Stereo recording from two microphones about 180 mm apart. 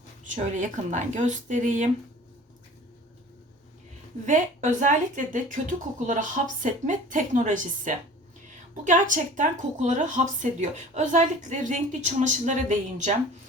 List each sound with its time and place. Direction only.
0.3 s a woman's voice: 45° right (ahead or behind)
4.3 s a woman's voice: 45° right (ahead or behind)